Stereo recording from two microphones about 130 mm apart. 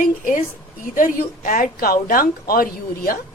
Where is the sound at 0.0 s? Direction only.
90° left.